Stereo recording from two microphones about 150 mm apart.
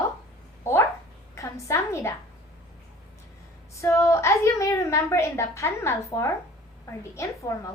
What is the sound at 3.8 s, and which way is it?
A woman's voice, 20° left (ahead or behind).